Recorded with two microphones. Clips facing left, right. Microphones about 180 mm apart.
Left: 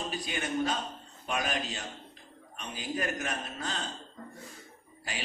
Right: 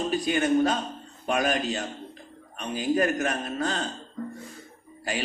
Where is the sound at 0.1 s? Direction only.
50° right (ahead or behind).